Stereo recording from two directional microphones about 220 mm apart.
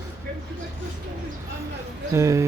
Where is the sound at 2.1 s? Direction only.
15° right (ahead or behind).